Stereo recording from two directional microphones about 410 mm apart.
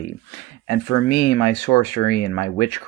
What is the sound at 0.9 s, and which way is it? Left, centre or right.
Speech, left.